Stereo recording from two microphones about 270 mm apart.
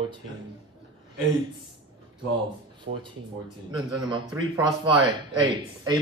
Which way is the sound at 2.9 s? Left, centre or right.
Right.